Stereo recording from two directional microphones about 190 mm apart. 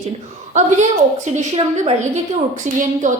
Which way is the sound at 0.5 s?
40° right (ahead or behind).